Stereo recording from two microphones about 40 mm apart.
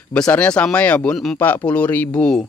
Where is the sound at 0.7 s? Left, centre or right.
Left.